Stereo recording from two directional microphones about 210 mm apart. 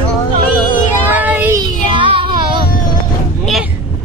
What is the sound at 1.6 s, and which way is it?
Child singing, 20° right (ahead or behind).